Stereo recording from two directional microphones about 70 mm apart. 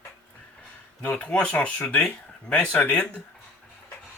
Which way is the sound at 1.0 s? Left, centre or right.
Left.